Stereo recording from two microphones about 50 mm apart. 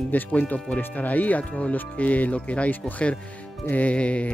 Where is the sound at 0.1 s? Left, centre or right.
Left.